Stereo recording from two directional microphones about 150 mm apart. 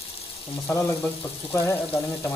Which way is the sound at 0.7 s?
10° left (ahead or behind).